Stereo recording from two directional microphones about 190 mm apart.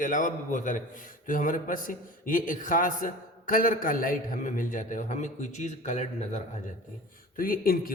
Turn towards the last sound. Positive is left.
turn(degrees=50)  # may be behind; listen again after turning